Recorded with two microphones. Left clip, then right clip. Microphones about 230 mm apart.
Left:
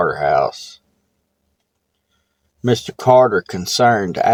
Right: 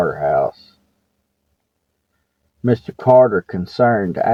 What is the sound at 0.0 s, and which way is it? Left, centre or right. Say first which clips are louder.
Speech: left 1 dB; centre.